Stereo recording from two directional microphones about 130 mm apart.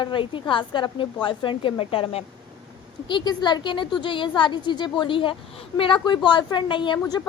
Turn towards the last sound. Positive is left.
turn(degrees=30)  # may be behind; listen again after turning